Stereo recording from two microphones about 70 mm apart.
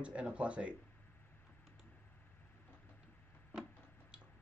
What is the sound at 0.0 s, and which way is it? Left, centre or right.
Speech, centre.